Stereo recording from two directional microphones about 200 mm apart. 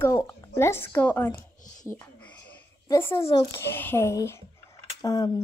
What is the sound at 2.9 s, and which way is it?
A woman's voice, 15° left (ahead or behind).